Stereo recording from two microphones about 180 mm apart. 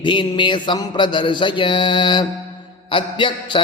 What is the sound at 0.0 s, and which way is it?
A man's voice, 25° left (ahead or behind).